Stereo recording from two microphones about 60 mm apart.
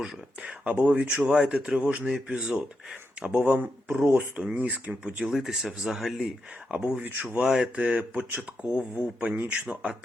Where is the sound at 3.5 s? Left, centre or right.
Right.